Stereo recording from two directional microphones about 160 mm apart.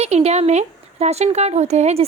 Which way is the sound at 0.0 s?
40° right (ahead or behind).